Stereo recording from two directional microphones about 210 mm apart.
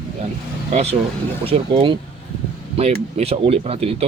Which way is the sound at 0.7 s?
30° right (ahead or behind).